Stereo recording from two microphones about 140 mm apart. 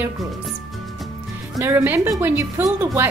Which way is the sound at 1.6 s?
15° right (ahead or behind).